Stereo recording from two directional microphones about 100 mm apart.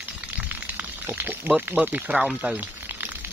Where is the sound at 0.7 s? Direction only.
20° right (ahead or behind).